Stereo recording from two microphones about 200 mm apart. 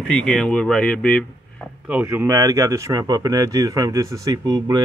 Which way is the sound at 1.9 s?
10° right (ahead or behind).